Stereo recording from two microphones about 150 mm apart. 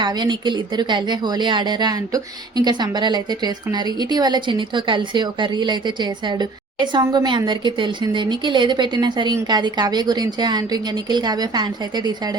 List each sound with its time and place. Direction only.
0.0 s a woman's voice: 30° right (ahead or behind)